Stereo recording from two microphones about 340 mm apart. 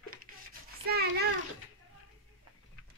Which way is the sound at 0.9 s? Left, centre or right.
Right.